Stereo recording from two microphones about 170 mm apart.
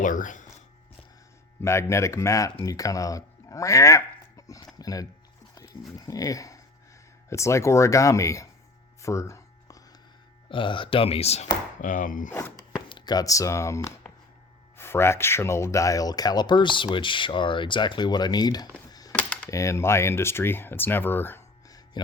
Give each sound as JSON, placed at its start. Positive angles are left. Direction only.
{"t": 0.0, "sound": "speech", "side_deg": 50}
{"t": 1.6, "sound": "speech", "side_deg": 15}
{"t": 9.0, "sound": "a sound", "side_deg": 15}
{"t": 10.5, "sound": "speech", "side_deg": 30}
{"t": 12.3, "sound": "walk", "side_deg": 15}
{"t": 12.9, "sound": "speech", "side_deg": 25}
{"t": 18.9, "sound": "a sound", "side_deg": 20}
{"t": 19.1, "sound": "computer keyboard", "side_deg": 5}
{"t": 19.5, "sound": "speech", "side_deg": 15}